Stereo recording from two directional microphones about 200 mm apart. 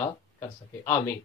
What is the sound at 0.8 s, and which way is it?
Speech, 10° left (ahead or behind).